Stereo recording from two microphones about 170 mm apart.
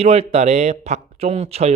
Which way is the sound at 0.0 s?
35° right (ahead or behind).